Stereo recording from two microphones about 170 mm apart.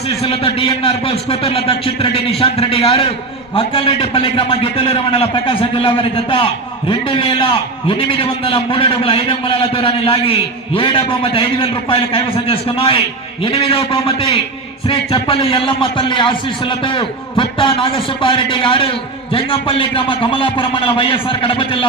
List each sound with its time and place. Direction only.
0.2 s a man's voice: 35° left (ahead or behind)